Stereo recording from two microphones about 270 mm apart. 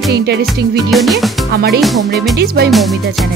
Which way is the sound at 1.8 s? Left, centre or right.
Centre.